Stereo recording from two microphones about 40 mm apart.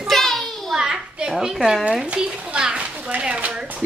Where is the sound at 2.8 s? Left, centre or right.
Right.